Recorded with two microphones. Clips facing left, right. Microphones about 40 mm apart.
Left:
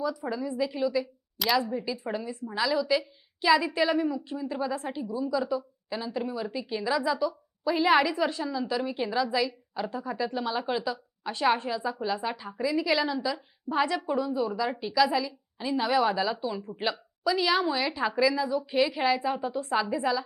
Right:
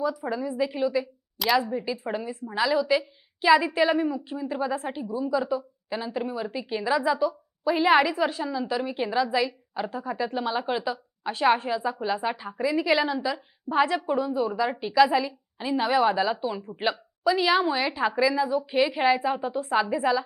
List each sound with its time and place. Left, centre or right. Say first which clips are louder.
0.3 s a woman's voice: right 2 dB; centre
1.4 s speech: right 3 dB; centre
1.7 s a woman's voice: right 2 dB; centre